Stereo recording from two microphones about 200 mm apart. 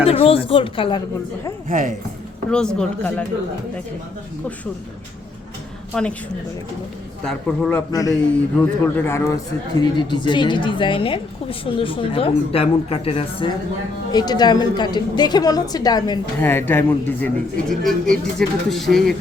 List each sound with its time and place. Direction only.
0.0 s a woman's voice: 30° left (ahead or behind)
1.6 s speech: 40° right (ahead or behind)
2.5 s speech: 5° left (ahead or behind)
5.9 s speech: 5° left (ahead or behind)
7.3 s speech: 5° left (ahead or behind)
7.9 s a man's voice: 15° left (ahead or behind); by 19.1 s centre (ahead or behind)